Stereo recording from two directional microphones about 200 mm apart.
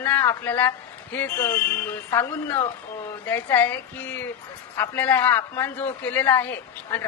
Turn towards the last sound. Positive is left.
turn(degrees=10)  # may be behind; listen again after turning